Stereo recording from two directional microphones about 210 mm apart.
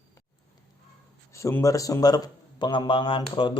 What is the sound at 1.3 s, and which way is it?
A man's voice, 15° left (ahead or behind).